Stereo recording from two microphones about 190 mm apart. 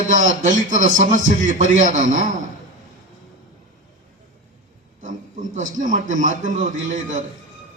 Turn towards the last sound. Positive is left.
turn(degrees=-40)  # may be behind; listen again after turning